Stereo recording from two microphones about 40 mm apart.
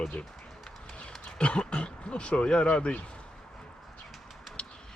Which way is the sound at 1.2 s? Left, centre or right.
Left.